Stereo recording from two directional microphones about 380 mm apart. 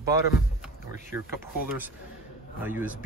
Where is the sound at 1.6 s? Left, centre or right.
Centre.